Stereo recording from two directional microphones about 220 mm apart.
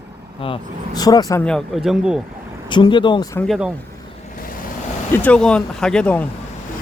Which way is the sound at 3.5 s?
5° right (ahead or behind).